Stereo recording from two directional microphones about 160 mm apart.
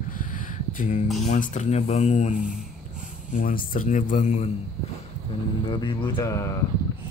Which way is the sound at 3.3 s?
55° left (ahead or behind).